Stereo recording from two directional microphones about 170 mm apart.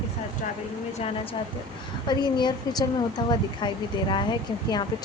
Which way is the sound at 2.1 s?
25° left (ahead or behind).